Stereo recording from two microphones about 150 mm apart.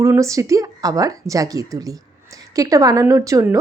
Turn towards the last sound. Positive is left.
turn(degrees=-20)  # may be behind; listen again after turning